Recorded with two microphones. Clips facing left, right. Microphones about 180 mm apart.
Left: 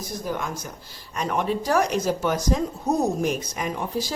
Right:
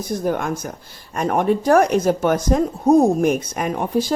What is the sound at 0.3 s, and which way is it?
Speech, 55° right (ahead or behind).